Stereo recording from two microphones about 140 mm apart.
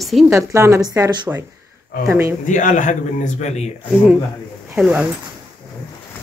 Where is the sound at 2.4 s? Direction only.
65° left (ahead or behind).